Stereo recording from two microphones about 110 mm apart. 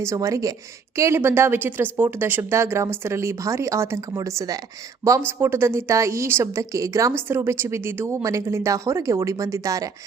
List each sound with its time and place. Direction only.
0.0 s a woman's voice: 25° right (ahead or behind)